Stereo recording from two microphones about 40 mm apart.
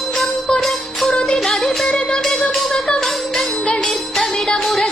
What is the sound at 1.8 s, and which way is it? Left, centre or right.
Music, centre.